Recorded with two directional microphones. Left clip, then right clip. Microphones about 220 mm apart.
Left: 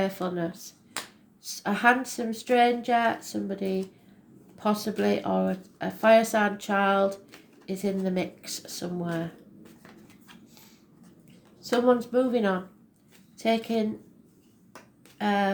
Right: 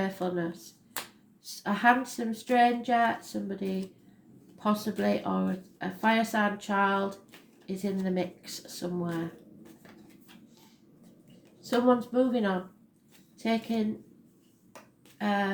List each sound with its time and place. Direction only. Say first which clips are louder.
0.0 s speech: left 3 dB; 35° left (ahead or behind)
11.6 s a woman's voice: left 2 dB; 35° left (ahead or behind)
15.2 s speech: left 3 dB; 35° left (ahead or behind)